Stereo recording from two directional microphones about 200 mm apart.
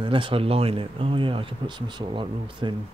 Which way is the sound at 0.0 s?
25° right (ahead or behind).